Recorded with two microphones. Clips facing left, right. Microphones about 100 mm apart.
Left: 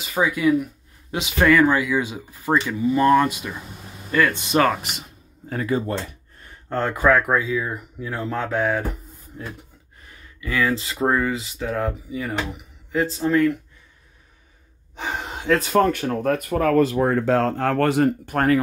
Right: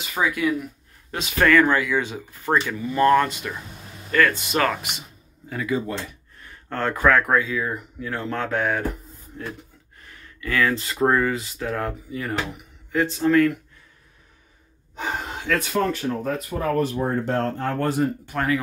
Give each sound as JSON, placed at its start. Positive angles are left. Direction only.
{"t": 0.1, "sound": "speech", "side_deg": 5}
{"t": 1.1, "sound": "speech", "side_deg": 15}
{"t": 5.5, "sound": "a sound", "side_deg": 40}
{"t": 6.7, "sound": "speech", "side_deg": 15}
{"t": 10.4, "sound": "speech", "side_deg": 5}
{"t": 13.2, "sound": "speech", "side_deg": 15}
{"t": 15.4, "sound": "speech", "side_deg": 30}
{"t": 15.7, "sound": "speech", "side_deg": 55}
{"t": 18.2, "sound": "speech", "side_deg": 50}